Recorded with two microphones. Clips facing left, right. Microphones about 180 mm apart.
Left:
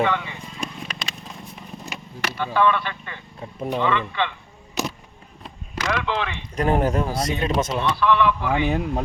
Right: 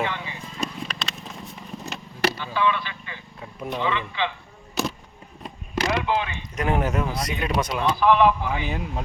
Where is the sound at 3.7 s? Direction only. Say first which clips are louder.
Left 3 dB; 55° left (ahead or behind).